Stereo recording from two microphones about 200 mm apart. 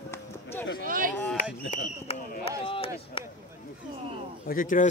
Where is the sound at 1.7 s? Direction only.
30° left (ahead or behind).